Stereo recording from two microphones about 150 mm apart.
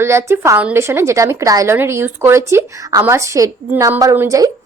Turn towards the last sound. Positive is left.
turn(degrees=-20)  # may be behind; listen again after turning